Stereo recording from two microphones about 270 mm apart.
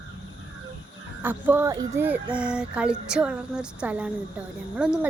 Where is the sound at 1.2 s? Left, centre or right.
Centre.